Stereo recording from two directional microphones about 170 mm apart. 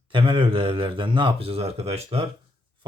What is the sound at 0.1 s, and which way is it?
Speech, 30° right (ahead or behind).